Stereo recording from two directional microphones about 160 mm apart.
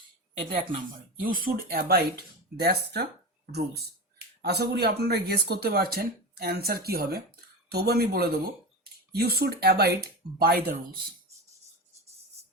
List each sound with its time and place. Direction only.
1.2 s speech: 60° right (ahead or behind); by 9.9 s 80° right
10.3 s speech: 70° right (ahead or behind)